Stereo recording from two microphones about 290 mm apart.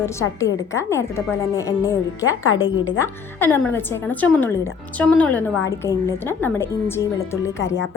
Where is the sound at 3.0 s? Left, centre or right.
Centre.